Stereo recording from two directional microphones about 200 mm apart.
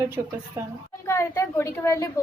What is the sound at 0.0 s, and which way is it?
Speech, 15° right (ahead or behind).